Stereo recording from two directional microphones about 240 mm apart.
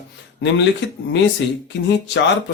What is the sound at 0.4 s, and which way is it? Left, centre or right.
Speech, left.